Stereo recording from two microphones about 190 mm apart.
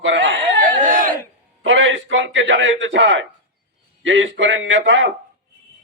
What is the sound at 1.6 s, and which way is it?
A man's voice, 75° right (ahead or behind).